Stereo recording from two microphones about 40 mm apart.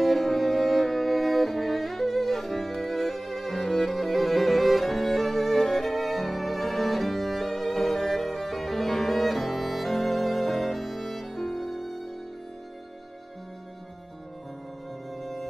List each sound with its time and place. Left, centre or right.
0.0 s music: centre